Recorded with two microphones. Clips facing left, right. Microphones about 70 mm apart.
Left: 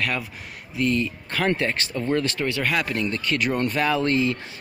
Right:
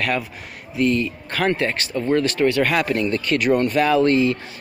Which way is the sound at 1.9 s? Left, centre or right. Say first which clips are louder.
Right 4 dB; centre.